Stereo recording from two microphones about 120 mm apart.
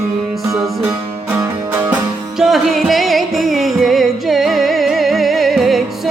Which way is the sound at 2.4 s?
Centre (ahead or behind).